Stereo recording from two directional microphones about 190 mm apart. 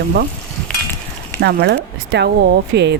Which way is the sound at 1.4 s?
60° right (ahead or behind).